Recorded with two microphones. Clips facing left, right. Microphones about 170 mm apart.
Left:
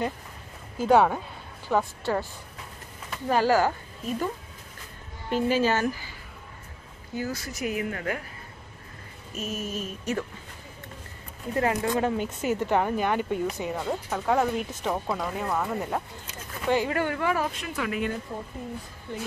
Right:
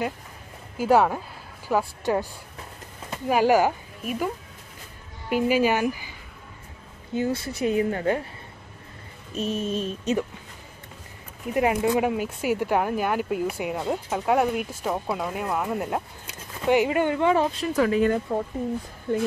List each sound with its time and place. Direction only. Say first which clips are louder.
0.7 s speech: even; 5° right (ahead or behind)
3.3 s a woman's voice: right 3 dB; 15° right (ahead or behind)
5.3 s speech: right 2 dB; 10° right (ahead or behind)
7.2 s speech: right 6 dB; 30° right (ahead or behind)
9.3 s speech: right 6 dB; 30° right (ahead or behind)
11.5 s speech: right 4 dB; 15° right (ahead or behind); by 18.1 s 35° right (ahead or behind)
19.1 s speech: right 10 dB; 45° right (ahead or behind)